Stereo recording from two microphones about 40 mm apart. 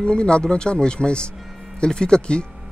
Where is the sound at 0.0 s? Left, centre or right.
Left.